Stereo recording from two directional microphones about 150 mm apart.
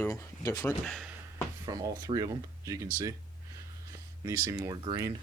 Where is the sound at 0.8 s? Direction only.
Centre (ahead or behind).